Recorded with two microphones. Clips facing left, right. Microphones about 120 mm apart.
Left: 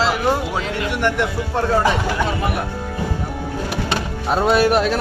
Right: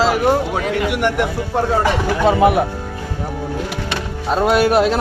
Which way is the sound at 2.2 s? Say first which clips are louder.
Right 9 dB; 90° right.